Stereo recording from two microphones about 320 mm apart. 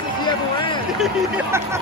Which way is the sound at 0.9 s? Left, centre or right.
Centre.